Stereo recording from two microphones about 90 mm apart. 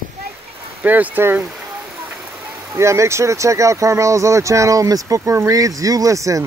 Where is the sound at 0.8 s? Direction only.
15° right (ahead or behind).